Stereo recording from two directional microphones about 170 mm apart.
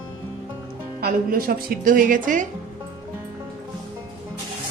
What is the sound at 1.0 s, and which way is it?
Speech, 60° right (ahead or behind).